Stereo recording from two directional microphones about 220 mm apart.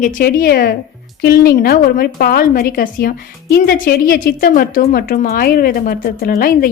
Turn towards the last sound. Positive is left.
turn(degrees=40)  # may be behind; listen again after turning